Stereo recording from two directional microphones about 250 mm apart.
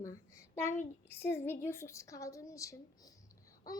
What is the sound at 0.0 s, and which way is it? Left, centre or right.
A child's voice, centre.